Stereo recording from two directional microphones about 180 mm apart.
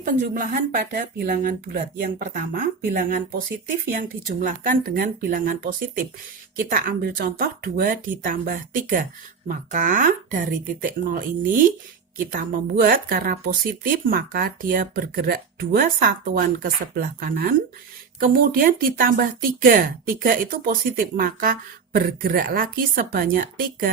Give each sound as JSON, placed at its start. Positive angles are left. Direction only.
{"t": 0.0, "sound": "speech", "side_deg": -50}